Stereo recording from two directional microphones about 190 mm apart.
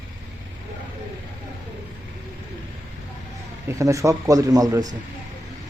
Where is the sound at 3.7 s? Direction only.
15° right (ahead or behind).